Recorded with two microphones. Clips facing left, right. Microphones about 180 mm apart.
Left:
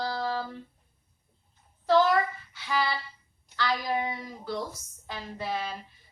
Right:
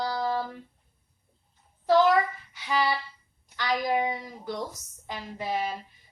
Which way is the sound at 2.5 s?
15° right (ahead or behind).